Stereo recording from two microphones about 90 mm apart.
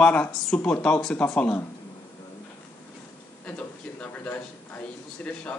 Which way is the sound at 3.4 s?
15° left (ahead or behind).